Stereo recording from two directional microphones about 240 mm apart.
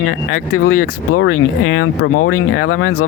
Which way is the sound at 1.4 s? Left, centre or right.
Left.